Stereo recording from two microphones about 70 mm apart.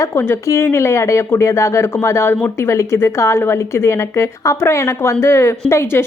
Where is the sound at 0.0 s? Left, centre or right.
Left.